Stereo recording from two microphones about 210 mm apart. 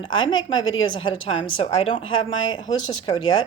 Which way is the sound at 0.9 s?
25° left (ahead or behind).